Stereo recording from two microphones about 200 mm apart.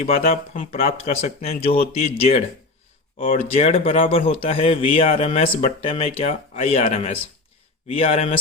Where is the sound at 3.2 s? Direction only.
30° left (ahead or behind).